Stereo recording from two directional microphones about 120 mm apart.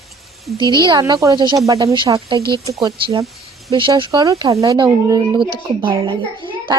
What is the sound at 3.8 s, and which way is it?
A child's voice, 45° right (ahead or behind).